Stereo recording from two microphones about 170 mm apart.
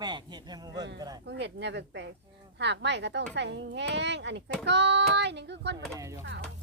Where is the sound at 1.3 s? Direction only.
90° right.